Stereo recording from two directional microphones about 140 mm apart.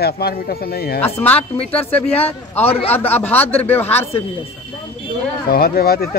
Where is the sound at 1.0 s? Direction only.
15° left (ahead or behind).